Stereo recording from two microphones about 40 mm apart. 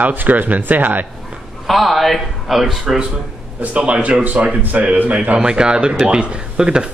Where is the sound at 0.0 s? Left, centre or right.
Right.